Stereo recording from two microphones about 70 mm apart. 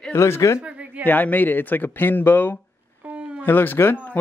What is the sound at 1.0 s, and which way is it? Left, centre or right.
Speech, left.